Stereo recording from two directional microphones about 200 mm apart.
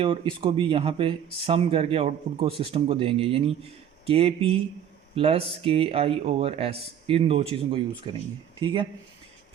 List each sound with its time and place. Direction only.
0.0 s speech: 25° right (ahead or behind)